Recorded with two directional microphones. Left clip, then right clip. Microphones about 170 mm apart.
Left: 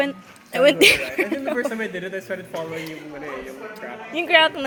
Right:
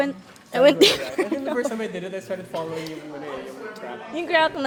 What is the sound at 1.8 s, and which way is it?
Speech, 30° left (ahead or behind).